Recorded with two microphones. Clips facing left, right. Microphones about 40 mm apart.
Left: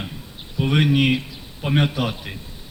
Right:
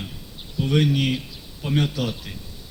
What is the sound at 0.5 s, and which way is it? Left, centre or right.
A man's voice, left.